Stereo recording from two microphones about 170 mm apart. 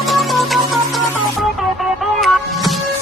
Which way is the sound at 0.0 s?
Centre (ahead or behind).